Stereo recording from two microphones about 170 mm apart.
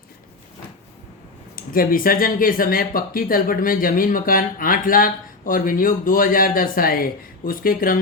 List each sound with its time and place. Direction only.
1.5 s speech: 55° left (ahead or behind)